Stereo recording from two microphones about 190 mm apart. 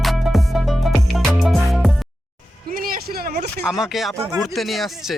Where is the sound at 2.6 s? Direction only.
50° right (ahead or behind).